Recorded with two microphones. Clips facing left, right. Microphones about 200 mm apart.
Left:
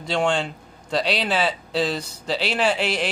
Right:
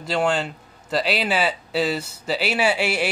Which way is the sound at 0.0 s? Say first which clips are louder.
Even; 5° right (ahead or behind).